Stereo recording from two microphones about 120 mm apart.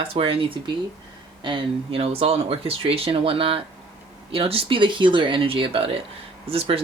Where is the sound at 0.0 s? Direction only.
50° right (ahead or behind).